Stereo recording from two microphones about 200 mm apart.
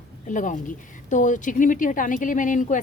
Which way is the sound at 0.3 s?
40° left (ahead or behind).